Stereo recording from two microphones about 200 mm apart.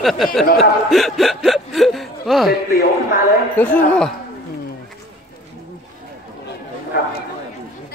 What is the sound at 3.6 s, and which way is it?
Speech, 10° left (ahead or behind).